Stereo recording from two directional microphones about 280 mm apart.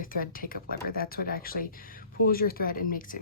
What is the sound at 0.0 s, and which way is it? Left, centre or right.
Speech, left.